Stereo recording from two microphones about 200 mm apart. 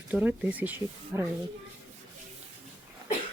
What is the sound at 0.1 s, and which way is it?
Speech, 5° right (ahead or behind).